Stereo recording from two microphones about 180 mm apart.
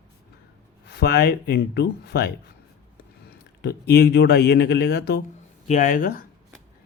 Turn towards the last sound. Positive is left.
turn(degrees=50)  # may be behind; listen again after turning